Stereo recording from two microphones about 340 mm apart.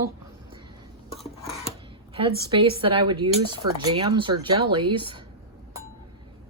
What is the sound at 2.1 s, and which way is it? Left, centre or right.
Speech, centre.